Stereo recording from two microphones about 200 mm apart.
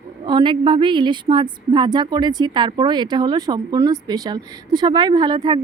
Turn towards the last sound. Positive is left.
turn(degrees=-20)  # may be behind; listen again after turning